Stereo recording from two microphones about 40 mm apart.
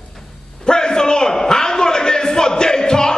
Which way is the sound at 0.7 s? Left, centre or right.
Centre.